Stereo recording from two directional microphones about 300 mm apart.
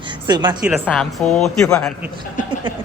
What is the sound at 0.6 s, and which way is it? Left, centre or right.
A man's voice, centre.